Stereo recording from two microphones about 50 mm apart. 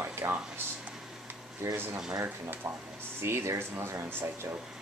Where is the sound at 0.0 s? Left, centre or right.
Right.